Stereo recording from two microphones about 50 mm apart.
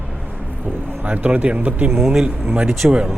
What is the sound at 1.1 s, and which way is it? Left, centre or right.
Speech, right.